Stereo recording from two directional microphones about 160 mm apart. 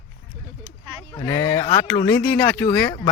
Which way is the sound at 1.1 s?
15° left (ahead or behind).